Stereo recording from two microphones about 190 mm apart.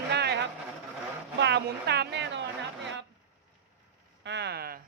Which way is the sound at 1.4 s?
65° right (ahead or behind).